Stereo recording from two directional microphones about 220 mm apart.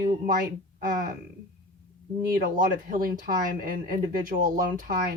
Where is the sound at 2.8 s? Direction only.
40° right (ahead or behind).